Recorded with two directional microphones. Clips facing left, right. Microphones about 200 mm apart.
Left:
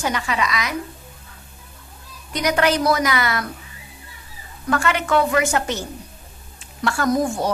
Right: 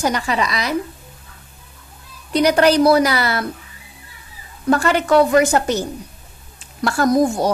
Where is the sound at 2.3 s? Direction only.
35° right (ahead or behind).